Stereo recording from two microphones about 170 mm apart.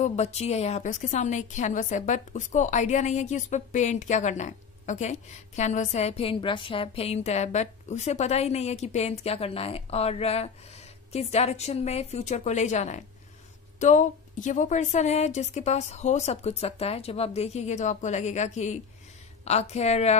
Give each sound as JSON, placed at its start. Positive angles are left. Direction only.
{"t": 0.0, "sound": "a woman's voice", "side_deg": 40}